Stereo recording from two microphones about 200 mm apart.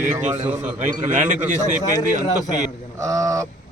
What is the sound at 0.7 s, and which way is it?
Speech, 40° right (ahead or behind).